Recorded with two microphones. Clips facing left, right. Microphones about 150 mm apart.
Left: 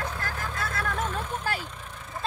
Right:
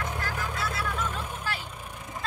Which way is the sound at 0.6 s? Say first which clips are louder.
Left 3 dB; 50° left (ahead or behind).